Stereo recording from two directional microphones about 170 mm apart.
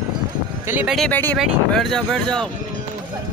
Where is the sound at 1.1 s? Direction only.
10° left (ahead or behind).